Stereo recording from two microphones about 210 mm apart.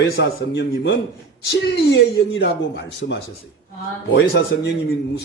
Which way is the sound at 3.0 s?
50° left (ahead or behind).